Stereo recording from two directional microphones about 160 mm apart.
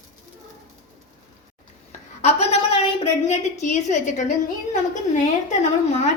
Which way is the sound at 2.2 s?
45° left (ahead or behind).